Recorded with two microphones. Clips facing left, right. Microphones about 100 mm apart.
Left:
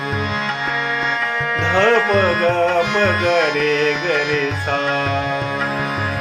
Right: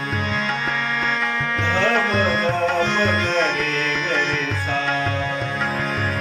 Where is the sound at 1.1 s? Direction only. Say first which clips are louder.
Left 2 dB; 5° left (ahead or behind).